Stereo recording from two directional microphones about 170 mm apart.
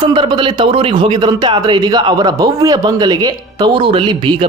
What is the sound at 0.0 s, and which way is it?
Speech, 30° right (ahead or behind).